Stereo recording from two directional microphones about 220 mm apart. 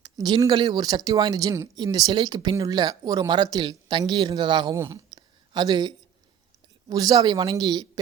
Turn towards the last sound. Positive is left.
turn(degrees=-15)  # may be behind; listen again after turning